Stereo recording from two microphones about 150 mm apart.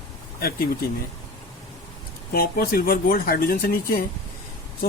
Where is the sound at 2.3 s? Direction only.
85° left.